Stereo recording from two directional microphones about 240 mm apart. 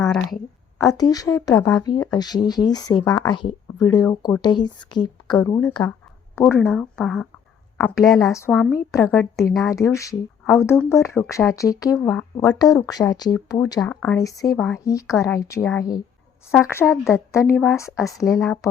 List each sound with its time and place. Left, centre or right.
0.0 s a woman's voice: centre
0.8 s speech: centre
6.7 s speech: centre
8.3 s speech: centre
9.0 s speech: centre
9.6 s speech: centre
17.3 s speech: centre
18.2 s speech: centre